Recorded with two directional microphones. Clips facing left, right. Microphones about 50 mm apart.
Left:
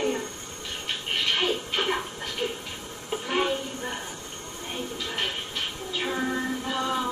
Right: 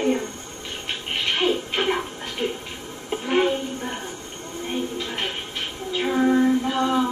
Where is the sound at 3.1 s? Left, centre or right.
Right.